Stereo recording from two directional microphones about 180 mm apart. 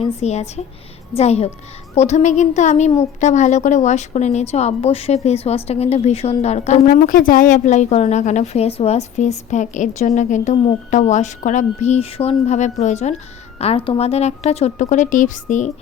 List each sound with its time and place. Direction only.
0.0 s a woman's voice: 35° left (ahead or behind)